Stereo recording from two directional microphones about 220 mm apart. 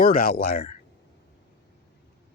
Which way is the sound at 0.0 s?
40° left (ahead or behind).